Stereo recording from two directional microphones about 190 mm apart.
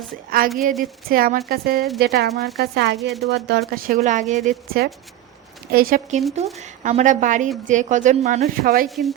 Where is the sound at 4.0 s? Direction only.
40° right (ahead or behind).